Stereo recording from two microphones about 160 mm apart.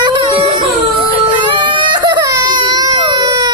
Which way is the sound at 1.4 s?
30° right (ahead or behind).